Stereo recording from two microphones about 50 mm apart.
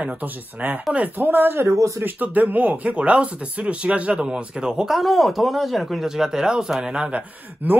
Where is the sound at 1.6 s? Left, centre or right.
Right.